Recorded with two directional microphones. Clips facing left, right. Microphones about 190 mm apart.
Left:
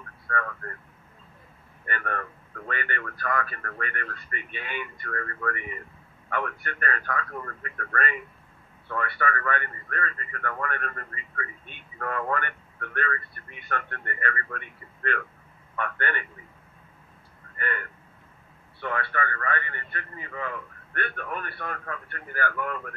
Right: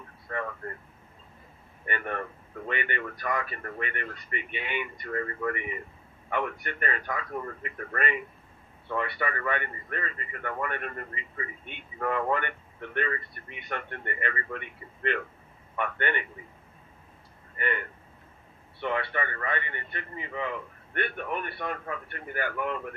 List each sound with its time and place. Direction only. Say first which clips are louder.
0.3 s a man's voice: left 1 dB; 20° right (ahead or behind)
1.9 s a man's voice: even; 20° right (ahead or behind)
17.6 s a man's voice: right 2 dB; 20° right (ahead or behind)